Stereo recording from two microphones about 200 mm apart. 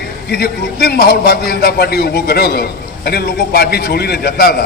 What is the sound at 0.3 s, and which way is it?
A man's voice, 55° left (ahead or behind).